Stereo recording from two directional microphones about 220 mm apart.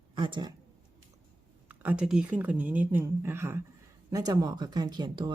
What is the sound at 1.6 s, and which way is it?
A woman's voice, 5° right (ahead or behind).